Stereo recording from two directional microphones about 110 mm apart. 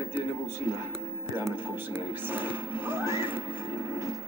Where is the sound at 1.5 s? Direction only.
20° right (ahead or behind).